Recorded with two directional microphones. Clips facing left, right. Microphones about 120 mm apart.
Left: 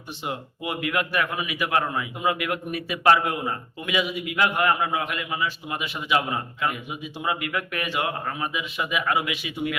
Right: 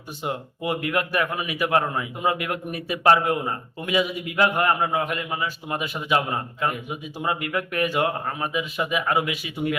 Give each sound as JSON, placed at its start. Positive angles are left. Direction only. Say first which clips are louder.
{"t": 0.2, "sound": "a man's voice", "louder": "right 3 dB", "side_deg": -40}